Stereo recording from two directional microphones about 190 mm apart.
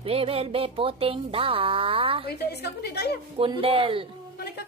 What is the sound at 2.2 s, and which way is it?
Speech, 60° left (ahead or behind).